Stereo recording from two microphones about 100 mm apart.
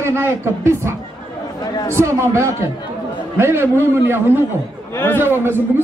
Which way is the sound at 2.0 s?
30° right (ahead or behind).